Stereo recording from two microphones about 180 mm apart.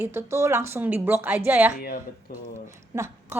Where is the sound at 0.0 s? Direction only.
15° right (ahead or behind).